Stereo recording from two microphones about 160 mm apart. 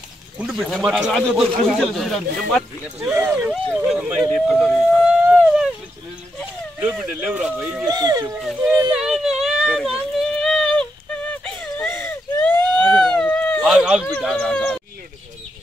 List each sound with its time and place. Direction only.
0.4 s speech: centre (ahead or behind)
3.0 s speech: 15° right (ahead or behind)
6.8 s speech: 10° right (ahead or behind)
7.9 s speech: 25° right (ahead or behind)
8.4 s speech: centre (ahead or behind)
9.0 s a sound: 5° right (ahead or behind)
13.7 s speech: 5° right (ahead or behind)